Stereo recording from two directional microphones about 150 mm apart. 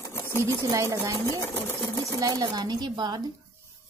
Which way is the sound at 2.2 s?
25° right (ahead or behind).